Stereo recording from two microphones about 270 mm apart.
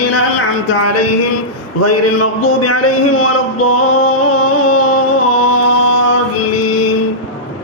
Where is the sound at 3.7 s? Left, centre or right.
Left.